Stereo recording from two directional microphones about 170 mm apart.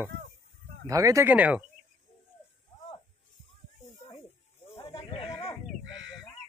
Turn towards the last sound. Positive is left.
turn(degrees=35)  # may be behind; listen again after turning